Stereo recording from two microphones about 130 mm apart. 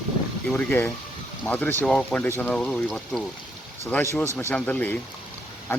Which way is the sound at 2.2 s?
20° left (ahead or behind).